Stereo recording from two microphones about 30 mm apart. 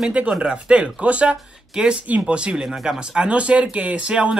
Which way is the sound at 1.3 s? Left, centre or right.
Right.